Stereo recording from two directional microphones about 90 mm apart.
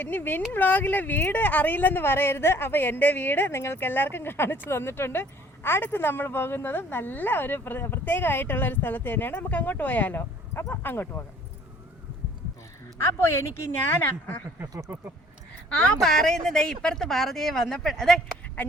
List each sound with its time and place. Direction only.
0.0 s a woman's voice: 20° left (ahead or behind)
13.0 s a woman's voice: 30° left (ahead or behind)
15.7 s speech: 5° left (ahead or behind)